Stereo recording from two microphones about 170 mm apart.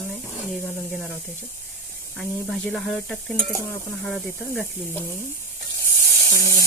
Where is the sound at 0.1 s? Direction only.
Centre (ahead or behind).